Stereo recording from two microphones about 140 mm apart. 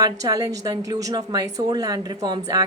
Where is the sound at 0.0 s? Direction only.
25° right (ahead or behind).